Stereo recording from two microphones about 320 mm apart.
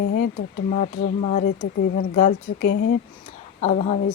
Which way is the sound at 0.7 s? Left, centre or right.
Left.